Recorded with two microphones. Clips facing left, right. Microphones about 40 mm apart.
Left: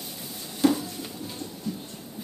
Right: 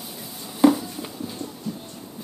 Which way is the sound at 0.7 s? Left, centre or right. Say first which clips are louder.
Right 4 dB; centre.